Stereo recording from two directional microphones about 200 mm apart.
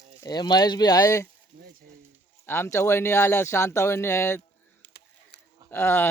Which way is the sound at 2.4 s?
10° left (ahead or behind).